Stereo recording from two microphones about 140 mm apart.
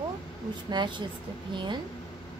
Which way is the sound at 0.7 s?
35° right (ahead or behind).